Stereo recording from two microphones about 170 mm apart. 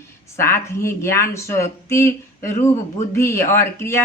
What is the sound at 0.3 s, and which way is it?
A woman's voice, 15° left (ahead or behind).